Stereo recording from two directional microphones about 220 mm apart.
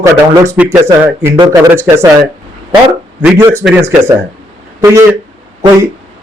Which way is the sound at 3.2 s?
10° right (ahead or behind).